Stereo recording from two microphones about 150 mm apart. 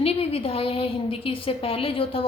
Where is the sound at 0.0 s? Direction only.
40° left (ahead or behind).